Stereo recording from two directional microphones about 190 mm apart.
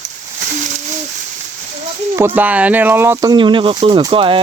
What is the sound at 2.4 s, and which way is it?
Speech, 5° right (ahead or behind).